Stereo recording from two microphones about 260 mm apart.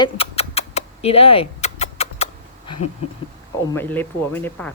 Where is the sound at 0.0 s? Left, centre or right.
Left.